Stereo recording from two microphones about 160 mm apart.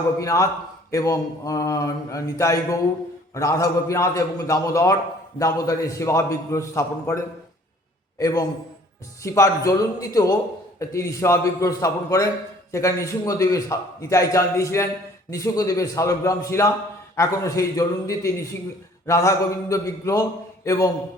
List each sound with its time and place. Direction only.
0.2 s speech: 20° left (ahead or behind)
8.2 s speech: 25° left (ahead or behind)